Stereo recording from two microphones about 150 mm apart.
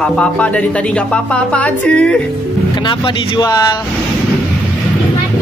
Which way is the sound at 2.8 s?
35° left (ahead or behind).